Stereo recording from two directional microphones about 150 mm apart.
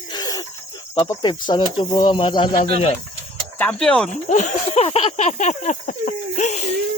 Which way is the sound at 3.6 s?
10° left (ahead or behind).